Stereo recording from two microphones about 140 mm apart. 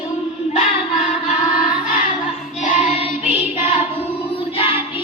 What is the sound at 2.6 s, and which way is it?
Child singing, 55° left (ahead or behind).